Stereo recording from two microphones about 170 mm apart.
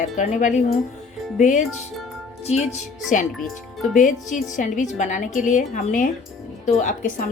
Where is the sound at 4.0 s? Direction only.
50° left (ahead or behind).